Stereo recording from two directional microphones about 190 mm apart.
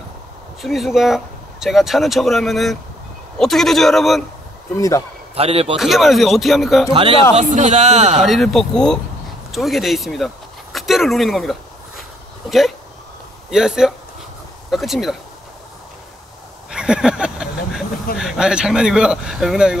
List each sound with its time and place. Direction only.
0.6 s speech: centre (ahead or behind)
4.7 s a man's voice: 15° left (ahead or behind)
5.3 s a man's voice: 30° right (ahead or behind)
5.8 s speech: centre (ahead or behind)
6.9 s speech: 30° right (ahead or behind)
7.3 s a man's voice: 40° right (ahead or behind)
8.2 s speech: centre (ahead or behind)
16.7 s a sound: 5° right (ahead or behind)
18.1 s speech: centre (ahead or behind)